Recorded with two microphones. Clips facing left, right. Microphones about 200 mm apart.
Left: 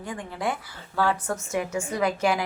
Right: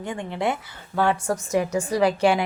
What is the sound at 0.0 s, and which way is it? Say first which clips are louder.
A woman's voice: right 4 dB; 25° right (ahead or behind).